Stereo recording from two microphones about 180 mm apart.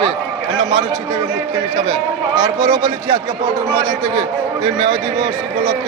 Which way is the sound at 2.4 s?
15° right (ahead or behind).